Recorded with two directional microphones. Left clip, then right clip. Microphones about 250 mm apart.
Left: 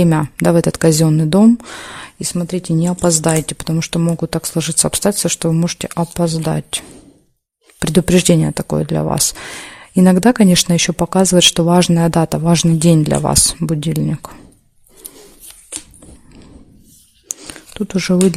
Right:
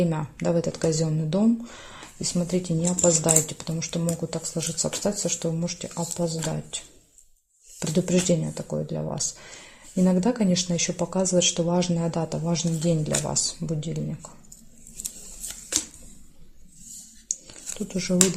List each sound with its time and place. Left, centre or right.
0.0 s speech: left
7.8 s speech: left
17.4 s a sound: left